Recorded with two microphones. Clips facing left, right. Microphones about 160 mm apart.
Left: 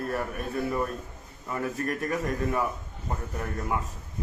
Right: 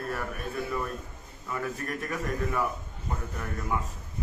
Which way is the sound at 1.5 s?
40° left (ahead or behind).